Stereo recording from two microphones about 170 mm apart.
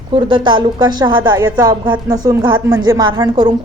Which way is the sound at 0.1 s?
25° right (ahead or behind).